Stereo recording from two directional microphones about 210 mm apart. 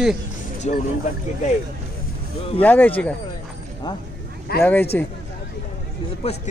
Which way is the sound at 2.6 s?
10° left (ahead or behind).